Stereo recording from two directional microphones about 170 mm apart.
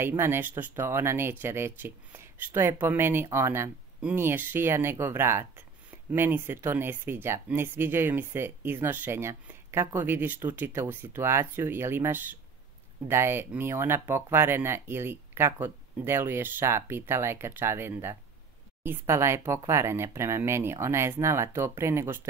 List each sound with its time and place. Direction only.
0.0 s speech: 15° right (ahead or behind)